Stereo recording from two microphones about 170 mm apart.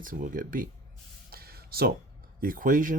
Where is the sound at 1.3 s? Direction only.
65° right (ahead or behind).